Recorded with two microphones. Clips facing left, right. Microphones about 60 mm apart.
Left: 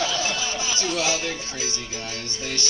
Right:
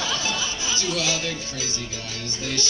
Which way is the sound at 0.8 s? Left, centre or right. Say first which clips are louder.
Left 1 dB; left.